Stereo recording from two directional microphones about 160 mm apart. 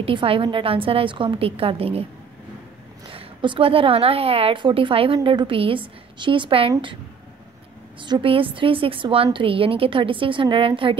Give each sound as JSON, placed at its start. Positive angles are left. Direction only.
{"t": 0.0, "sound": "a woman's voice", "side_deg": -35}
{"t": 3.1, "sound": "a woman's voice", "side_deg": -35}
{"t": 8.0, "sound": "a woman's voice", "side_deg": -35}